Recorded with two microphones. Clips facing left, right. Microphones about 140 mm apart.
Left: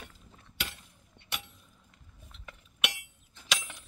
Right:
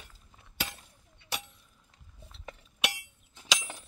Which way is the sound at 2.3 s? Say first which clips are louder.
Right 5 dB; 35° right (ahead or behind).